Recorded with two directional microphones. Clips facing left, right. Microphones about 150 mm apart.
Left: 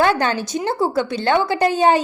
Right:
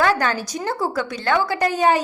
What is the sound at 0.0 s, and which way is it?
A woman's voice, 25° left (ahead or behind).